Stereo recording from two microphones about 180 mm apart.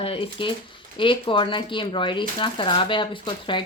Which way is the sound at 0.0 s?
30° left (ahead or behind).